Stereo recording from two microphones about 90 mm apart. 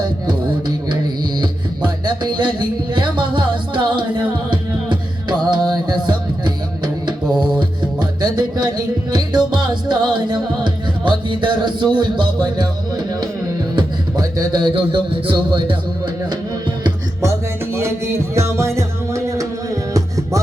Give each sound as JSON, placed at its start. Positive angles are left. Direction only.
{"t": 2.0, "sound": "music", "side_deg": -55}
{"t": 13.7, "sound": "music", "side_deg": -50}
{"t": 14.7, "sound": "speech", "side_deg": -65}
{"t": 18.3, "sound": "music", "side_deg": -30}